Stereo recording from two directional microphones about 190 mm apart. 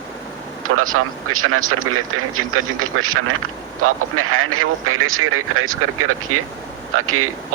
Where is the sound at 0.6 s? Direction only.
90° right.